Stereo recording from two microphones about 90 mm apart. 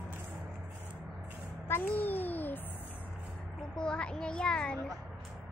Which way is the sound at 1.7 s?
20° left (ahead or behind).